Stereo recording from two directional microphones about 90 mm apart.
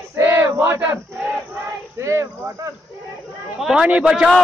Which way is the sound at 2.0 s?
35° right (ahead or behind).